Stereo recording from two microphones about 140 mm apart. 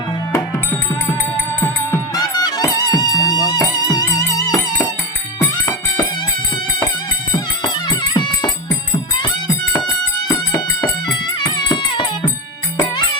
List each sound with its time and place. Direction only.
2.1 s music: 30° left (ahead or behind)
7.3 s music: 30° left (ahead or behind)